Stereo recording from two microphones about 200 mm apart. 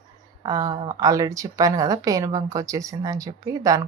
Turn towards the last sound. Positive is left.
turn(degrees=-15)  # may be behind; listen again after turning